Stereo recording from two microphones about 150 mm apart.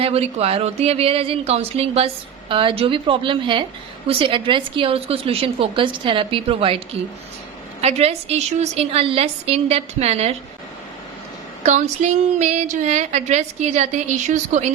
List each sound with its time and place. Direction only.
0.0 s a woman's voice: 40° right (ahead or behind)
11.6 s a woman's voice: 50° right (ahead or behind)